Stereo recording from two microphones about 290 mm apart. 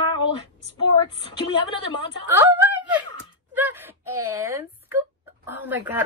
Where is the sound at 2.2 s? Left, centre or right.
Centre.